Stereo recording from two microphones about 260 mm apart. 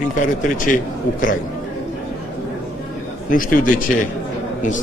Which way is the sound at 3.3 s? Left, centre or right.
Left.